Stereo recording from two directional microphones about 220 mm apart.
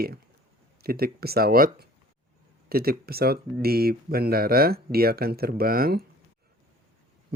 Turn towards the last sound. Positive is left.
turn(degrees=-45)  # may be behind; listen again after turning